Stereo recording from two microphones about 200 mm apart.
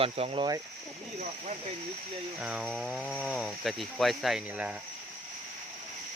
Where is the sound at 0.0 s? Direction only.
30° right (ahead or behind).